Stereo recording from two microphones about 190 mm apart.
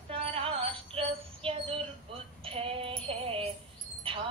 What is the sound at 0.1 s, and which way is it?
Female singing, 30° right (ahead or behind).